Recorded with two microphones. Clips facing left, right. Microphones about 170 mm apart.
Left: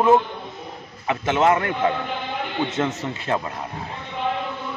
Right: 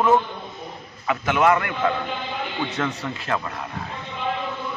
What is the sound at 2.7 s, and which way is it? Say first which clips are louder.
Speech: left 2 dB; 25° left (ahead or behind).